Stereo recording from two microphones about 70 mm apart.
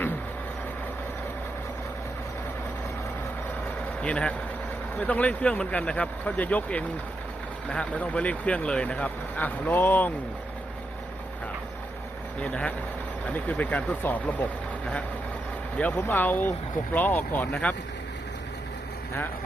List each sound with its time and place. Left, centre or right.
4.0 s speech: centre
12.4 s speech: centre
16.0 s speech: left